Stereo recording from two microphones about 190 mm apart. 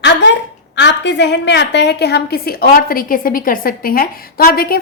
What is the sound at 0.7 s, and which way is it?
A woman's voice, 65° left (ahead or behind).